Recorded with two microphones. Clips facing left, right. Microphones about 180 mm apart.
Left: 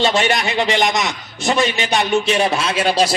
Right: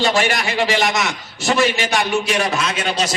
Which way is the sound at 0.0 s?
20° left (ahead or behind).